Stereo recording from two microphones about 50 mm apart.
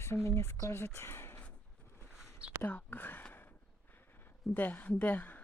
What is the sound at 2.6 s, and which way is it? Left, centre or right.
Speech, left.